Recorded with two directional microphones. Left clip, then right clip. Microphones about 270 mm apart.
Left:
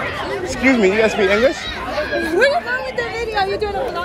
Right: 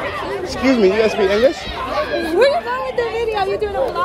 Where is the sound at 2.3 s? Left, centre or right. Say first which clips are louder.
Right 1 dB; right.